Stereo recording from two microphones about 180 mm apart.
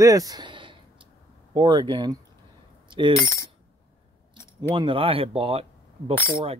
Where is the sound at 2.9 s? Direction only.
25° right (ahead or behind).